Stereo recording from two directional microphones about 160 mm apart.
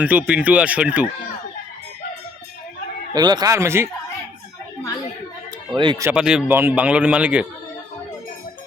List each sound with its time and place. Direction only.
0.0 s speech: 10° right (ahead or behind)
3.2 s speech: 25° right (ahead or behind)
5.7 s speech: 30° right (ahead or behind)
6.1 s speech: 5° right (ahead or behind)